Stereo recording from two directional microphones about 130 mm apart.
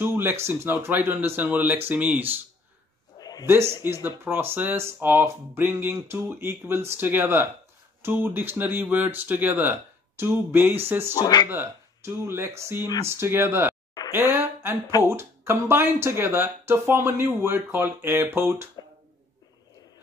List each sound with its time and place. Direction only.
0.0 s speech: 15° right (ahead or behind)
3.2 s a sound: 30° left (ahead or behind)
3.8 s speech: 20° right (ahead or behind)
11.1 s speech: 30° left (ahead or behind)
11.4 s speech: 15° right (ahead or behind)